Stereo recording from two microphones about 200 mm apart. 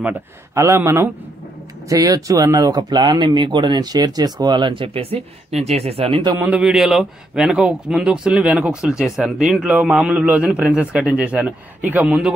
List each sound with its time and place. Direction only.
0.6 s a man's voice: 15° right (ahead or behind)
6.3 s a man's voice: 10° right (ahead or behind)